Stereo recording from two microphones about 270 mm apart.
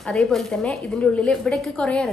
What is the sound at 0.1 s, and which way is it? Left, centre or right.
A woman's voice, centre.